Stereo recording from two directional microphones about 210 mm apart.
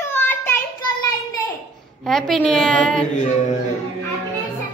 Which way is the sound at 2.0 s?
Centre (ahead or behind).